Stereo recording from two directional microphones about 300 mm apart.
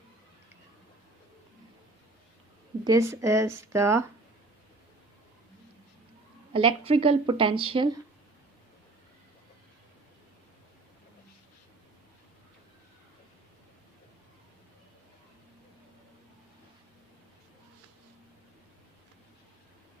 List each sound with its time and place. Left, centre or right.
2.8 s speech: centre
6.5 s speech: centre